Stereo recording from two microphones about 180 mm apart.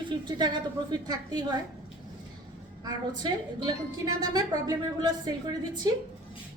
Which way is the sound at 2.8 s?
20° right (ahead or behind).